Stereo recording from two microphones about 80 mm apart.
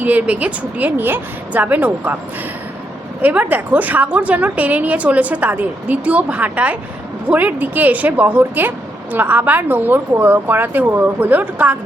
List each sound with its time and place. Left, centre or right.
0.0 s a woman's voice: centre
3.2 s a woman's voice: centre